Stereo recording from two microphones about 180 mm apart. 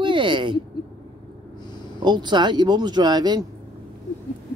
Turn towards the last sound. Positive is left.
turn(degrees=-20)  # may be behind; listen again after turning